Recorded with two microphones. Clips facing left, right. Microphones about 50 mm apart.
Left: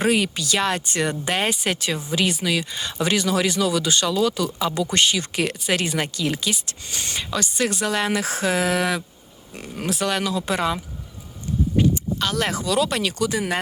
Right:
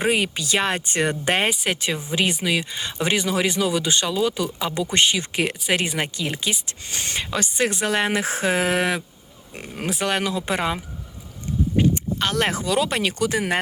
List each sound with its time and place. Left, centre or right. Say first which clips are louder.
0.0 s speech: left 1 dB; right
1.5 s speech: even; centre
1.7 s speech: even; centre
6.9 s speech: right 1 dB; right